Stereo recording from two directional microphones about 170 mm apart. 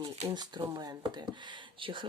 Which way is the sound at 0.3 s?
25° right (ahead or behind).